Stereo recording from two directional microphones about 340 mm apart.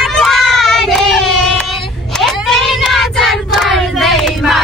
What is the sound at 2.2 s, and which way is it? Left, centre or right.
Child singing, centre.